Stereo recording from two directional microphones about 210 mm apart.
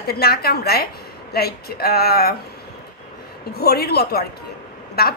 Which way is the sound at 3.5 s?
50° left (ahead or behind).